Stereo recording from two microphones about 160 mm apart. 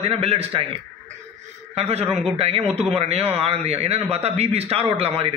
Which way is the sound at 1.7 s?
40° right (ahead or behind).